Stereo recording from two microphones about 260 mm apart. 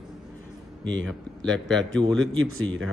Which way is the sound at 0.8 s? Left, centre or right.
Right.